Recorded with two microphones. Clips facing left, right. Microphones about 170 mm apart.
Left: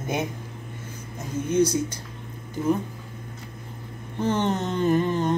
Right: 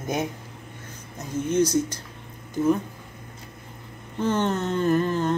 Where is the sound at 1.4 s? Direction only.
10° left (ahead or behind).